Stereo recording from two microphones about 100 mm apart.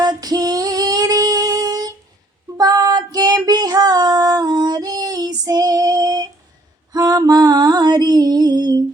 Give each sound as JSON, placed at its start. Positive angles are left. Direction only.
{"t": 0.0, "sound": "female singing", "side_deg": -40}
{"t": 6.9, "sound": "music", "side_deg": -40}